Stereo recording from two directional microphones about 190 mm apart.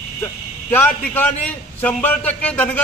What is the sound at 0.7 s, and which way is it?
A man's voice, 10° left (ahead or behind).